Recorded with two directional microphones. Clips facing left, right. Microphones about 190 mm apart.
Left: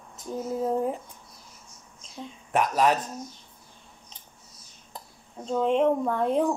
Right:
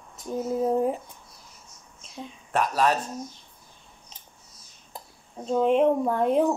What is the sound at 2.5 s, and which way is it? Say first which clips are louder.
Speech: left 1 dB; 15° left (ahead or behind).